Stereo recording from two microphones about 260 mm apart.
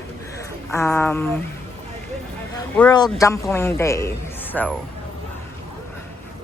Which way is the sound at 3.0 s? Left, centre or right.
Centre.